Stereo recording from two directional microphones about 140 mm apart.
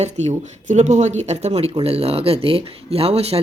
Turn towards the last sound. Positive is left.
turn(degrees=-45)  # may be behind; listen again after turning